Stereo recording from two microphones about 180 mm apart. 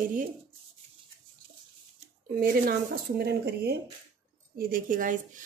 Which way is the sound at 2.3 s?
55° right (ahead or behind).